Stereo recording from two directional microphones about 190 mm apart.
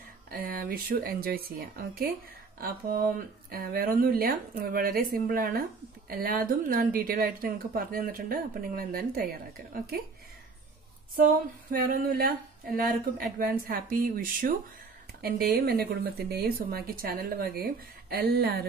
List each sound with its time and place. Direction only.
0.3 s speech: 50° right (ahead or behind)
3.4 s speech: 50° right (ahead or behind)
11.7 s speech: 50° right (ahead or behind)